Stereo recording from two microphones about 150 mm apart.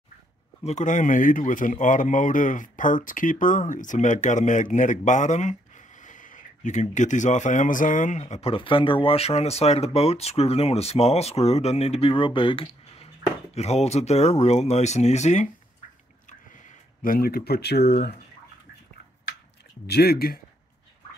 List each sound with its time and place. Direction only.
0.7 s a man's voice: 55° left (ahead or behind)
17.0 s speech: 75° left (ahead or behind)
19.9 s speech: 90° left